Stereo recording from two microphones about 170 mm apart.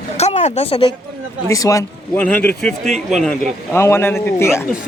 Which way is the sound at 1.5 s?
20° left (ahead or behind).